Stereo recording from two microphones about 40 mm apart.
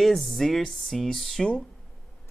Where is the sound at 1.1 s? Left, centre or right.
Centre.